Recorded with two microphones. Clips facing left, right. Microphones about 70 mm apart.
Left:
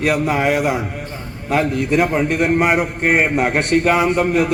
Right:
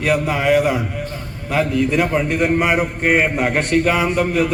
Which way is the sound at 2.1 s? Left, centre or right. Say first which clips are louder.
Left 1 dB; left.